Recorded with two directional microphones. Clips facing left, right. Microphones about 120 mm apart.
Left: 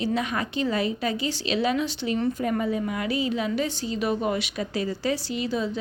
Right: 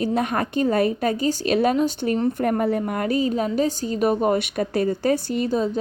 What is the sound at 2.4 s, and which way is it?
A woman's voice, 55° right (ahead or behind).